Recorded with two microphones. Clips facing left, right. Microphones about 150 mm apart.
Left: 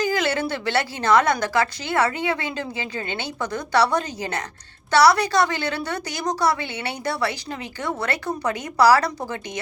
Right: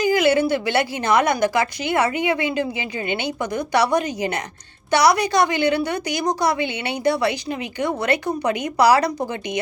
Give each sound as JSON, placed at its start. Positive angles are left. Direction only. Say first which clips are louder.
{"t": 0.0, "sound": "a woman's voice", "louder": "right 6 dB", "side_deg": -15}